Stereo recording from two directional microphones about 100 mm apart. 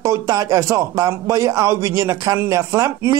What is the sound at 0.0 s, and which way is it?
Speech, 35° right (ahead or behind).